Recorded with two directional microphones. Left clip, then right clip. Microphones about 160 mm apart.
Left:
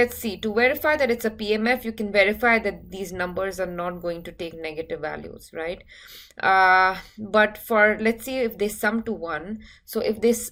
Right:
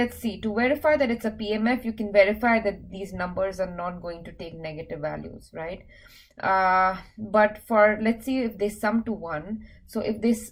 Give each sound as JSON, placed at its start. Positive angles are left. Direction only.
{"t": 0.2, "sound": "speech", "side_deg": 25}